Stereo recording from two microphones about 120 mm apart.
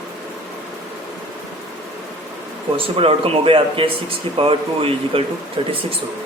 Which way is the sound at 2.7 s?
50° right (ahead or behind).